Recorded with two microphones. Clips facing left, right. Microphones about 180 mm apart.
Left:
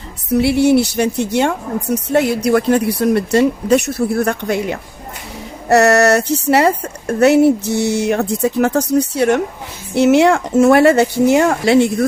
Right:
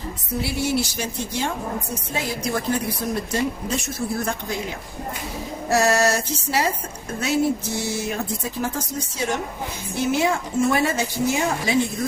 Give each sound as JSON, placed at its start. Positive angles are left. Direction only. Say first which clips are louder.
{"t": 0.3, "sound": "a woman's voice", "louder": "left 12 dB", "side_deg": 65}